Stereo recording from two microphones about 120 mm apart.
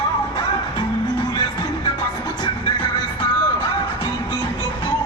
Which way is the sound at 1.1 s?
35° left (ahead or behind).